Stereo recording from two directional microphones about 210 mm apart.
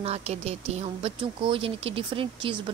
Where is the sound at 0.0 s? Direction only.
30° right (ahead or behind).